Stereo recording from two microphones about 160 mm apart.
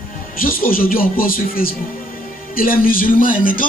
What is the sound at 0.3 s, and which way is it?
A man's voice, 60° left (ahead or behind).